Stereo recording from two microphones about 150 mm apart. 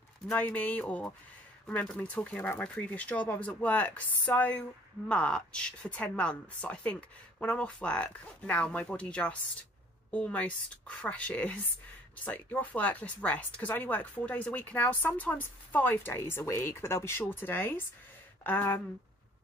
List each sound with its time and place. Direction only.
0.3 s speech: 10° left (ahead or behind)